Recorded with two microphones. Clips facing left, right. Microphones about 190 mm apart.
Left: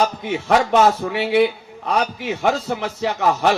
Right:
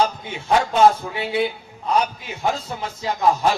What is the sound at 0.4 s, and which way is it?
A man's voice, 75° left (ahead or behind).